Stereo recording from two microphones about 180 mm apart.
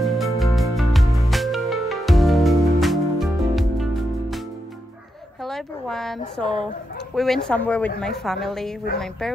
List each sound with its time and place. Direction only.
0.0 s music: centre (ahead or behind)
5.4 s a sound: centre (ahead or behind)
7.2 s speech: centre (ahead or behind)